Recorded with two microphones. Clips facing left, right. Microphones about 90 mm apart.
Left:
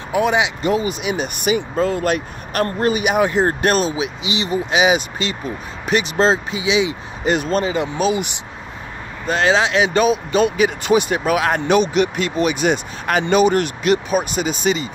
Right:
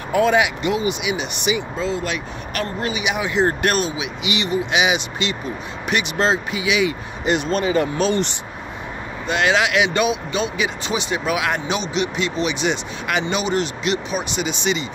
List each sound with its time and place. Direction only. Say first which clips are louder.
0.1 s speech: right 1 dB; 20° left (ahead or behind)
0.6 s speech: left 2 dB; 40° left (ahead or behind)
7.2 s speech: left 1 dB; 40° left (ahead or behind)
8.0 s speech: left 1 dB; 10° left (ahead or behind)
9.2 s speech: left 2 dB; 35° left (ahead or behind)